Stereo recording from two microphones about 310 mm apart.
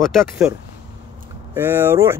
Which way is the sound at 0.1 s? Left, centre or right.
Centre.